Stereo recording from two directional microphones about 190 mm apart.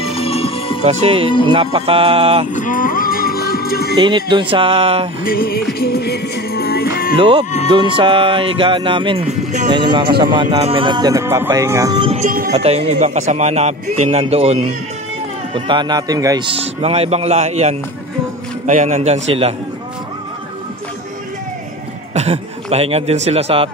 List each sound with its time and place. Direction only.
0.0 s music: 30° left (ahead or behind)
0.8 s speech: 30° right (ahead or behind)
2.5 s music: 45° left (ahead or behind)
4.0 s speech: 25° right (ahead or behind)
5.2 s music: 50° left (ahead or behind)
7.2 s speech: 25° right (ahead or behind)
12.1 s speech: 45° right (ahead or behind)
12.5 s a man's voice: 35° right (ahead or behind)
22.1 s a man's voice: 35° right (ahead or behind)